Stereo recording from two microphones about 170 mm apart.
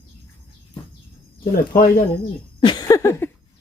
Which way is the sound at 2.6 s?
25° left (ahead or behind).